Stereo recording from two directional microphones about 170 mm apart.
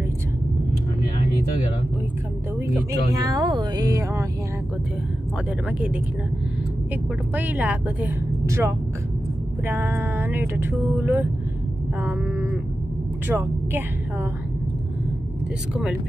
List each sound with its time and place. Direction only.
3.3 s speech: 25° right (ahead or behind)
7.3 s a woman's voice: 10° right (ahead or behind)